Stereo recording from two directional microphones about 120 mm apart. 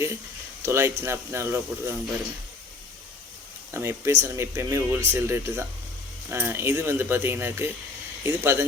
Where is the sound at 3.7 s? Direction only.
20° right (ahead or behind).